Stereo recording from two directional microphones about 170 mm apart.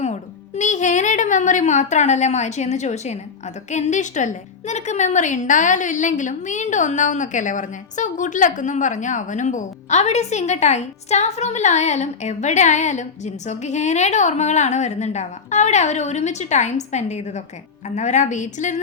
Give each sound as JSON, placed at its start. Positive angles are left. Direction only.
{"t": 0.0, "sound": "a woman's voice", "side_deg": 45}